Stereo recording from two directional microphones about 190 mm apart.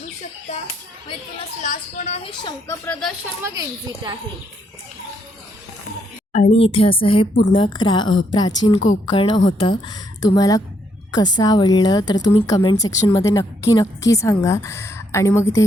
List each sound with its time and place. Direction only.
1.6 s speech: 40° left (ahead or behind)
2.6 s a woman's voice: 10° left (ahead or behind)
3.4 s a woman's voice: 20° right (ahead or behind)
6.3 s a woman's voice: 35° left (ahead or behind); by 15.6 s 15° left (ahead or behind)